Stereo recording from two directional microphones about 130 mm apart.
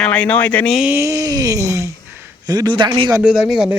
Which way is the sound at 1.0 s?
25° right (ahead or behind).